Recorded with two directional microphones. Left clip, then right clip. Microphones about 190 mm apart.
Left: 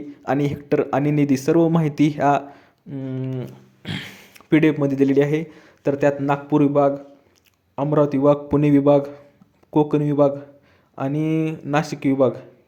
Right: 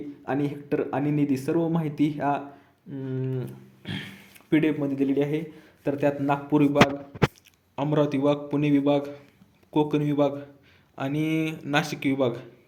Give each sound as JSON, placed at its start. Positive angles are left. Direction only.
{"t": 0.3, "sound": "speech", "side_deg": 35}
{"t": 7.8, "sound": "speech", "side_deg": 30}